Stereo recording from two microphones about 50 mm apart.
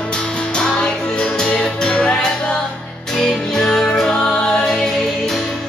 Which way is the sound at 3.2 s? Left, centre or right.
Centre.